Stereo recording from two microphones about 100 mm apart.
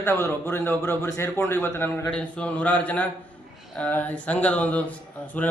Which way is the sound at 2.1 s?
10° left (ahead or behind).